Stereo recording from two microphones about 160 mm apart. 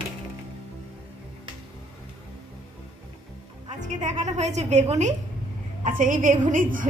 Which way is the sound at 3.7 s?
50° right (ahead or behind).